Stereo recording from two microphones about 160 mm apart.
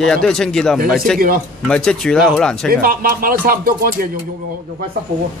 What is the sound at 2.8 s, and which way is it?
Speech, 65° right (ahead or behind).